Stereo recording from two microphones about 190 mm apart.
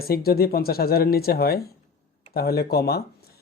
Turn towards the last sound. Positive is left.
turn(degrees=55)  # may be behind; listen again after turning